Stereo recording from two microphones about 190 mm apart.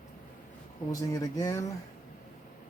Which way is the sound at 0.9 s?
20° left (ahead or behind).